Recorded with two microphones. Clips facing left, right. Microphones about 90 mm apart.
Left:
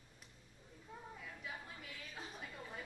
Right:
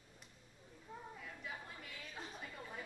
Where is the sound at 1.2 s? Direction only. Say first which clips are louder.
Even; centre (ahead or behind).